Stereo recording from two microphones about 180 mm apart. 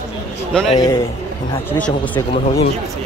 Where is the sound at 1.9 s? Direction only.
20° left (ahead or behind).